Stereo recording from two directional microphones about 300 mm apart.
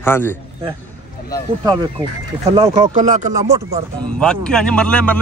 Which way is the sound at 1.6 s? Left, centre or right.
Centre.